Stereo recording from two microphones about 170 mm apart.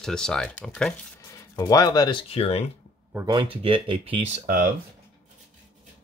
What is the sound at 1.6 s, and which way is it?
Speech, 20° left (ahead or behind).